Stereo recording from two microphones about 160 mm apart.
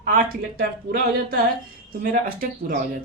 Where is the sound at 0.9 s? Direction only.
65° right (ahead or behind).